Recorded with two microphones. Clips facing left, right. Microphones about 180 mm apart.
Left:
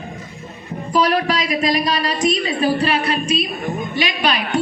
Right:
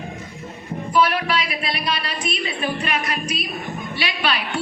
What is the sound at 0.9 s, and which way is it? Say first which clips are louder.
Music: left 2 dB; 40° left (ahead or behind).